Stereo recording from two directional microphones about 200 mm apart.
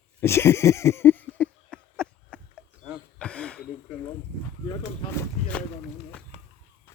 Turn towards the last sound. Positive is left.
turn(degrees=10)  # may be behind; listen again after turning